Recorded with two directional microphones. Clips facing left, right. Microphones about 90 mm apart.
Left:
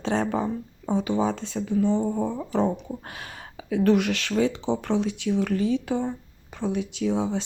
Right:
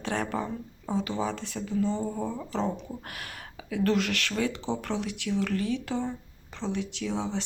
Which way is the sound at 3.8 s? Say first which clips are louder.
Left 5 dB; 20° left (ahead or behind).